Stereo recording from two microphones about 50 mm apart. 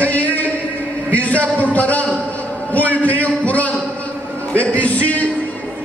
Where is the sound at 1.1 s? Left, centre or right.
Left.